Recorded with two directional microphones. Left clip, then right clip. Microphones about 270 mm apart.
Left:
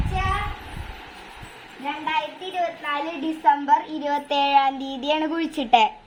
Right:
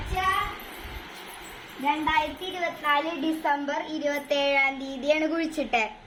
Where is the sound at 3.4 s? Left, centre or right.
Left.